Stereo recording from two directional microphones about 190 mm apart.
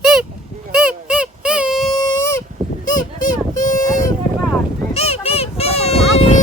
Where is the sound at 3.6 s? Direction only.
45° left (ahead or behind).